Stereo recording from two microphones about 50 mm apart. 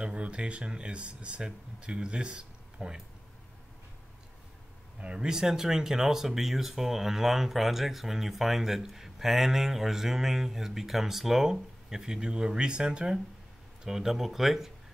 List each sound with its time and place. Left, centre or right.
0.0 s speech: right
5.0 s speech: centre